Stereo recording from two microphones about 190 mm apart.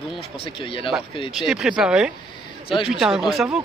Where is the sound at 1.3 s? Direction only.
5° right (ahead or behind).